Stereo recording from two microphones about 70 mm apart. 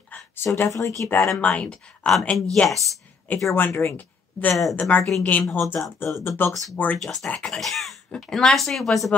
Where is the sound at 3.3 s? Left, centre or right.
Left.